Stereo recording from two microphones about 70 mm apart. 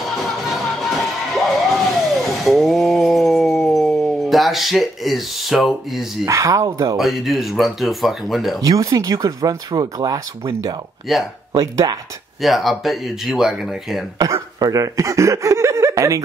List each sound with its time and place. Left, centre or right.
0.0 s music: centre
1.5 s vehicle: centre
6.2 s speech: right
7.0 s speech: centre
8.5 s speech: right
11.1 s speech: centre
11.6 s speech: right
12.4 s speech: centre
14.1 s speech: right